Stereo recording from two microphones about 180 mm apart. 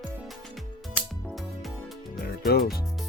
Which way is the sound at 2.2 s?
55° left (ahead or behind).